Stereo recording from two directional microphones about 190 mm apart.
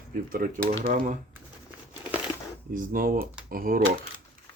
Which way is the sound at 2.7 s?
50° right (ahead or behind).